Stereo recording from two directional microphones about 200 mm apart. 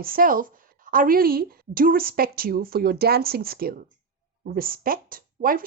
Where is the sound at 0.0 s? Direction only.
45° right (ahead or behind).